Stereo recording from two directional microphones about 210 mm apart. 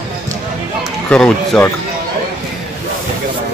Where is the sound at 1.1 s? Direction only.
5° left (ahead or behind).